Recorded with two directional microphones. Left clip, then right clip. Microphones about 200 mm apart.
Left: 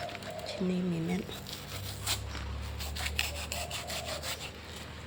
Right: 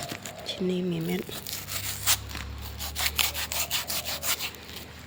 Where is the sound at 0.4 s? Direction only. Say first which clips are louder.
Right 7 dB; 35° right (ahead or behind).